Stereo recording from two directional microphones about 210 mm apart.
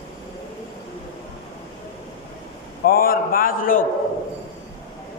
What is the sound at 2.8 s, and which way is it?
Chant, 45° left (ahead or behind).